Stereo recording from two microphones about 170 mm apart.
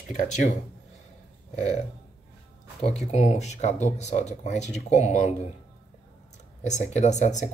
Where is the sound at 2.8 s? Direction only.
40° left (ahead or behind).